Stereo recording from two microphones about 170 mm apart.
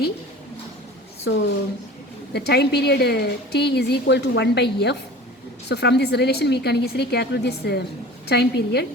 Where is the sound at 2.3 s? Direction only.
75° left (ahead or behind).